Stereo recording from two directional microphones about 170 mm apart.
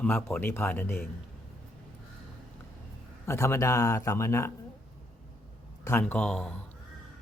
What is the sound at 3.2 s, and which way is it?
Speech, 15° left (ahead or behind).